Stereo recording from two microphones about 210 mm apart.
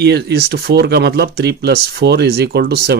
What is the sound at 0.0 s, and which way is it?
Speech, 50° right (ahead or behind).